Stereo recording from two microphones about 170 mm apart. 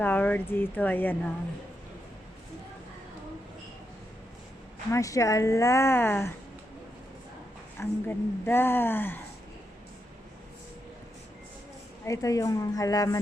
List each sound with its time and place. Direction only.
0.0 s a woman's voice: 10° left (ahead or behind)
4.9 s a woman's voice: 20° left (ahead or behind)
7.8 s a woman's voice: 15° left (ahead or behind)
12.0 s a woman's voice: 20° left (ahead or behind)